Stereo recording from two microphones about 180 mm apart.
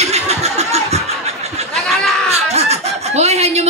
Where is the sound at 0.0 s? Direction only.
35° right (ahead or behind).